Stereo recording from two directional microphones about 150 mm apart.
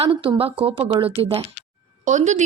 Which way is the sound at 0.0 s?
35° right (ahead or behind).